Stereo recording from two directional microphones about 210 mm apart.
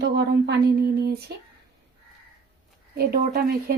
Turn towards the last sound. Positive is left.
turn(degrees=-45)  # may be behind; listen again after turning